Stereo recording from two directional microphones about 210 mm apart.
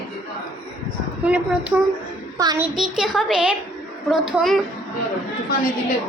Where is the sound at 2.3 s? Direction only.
15° right (ahead or behind).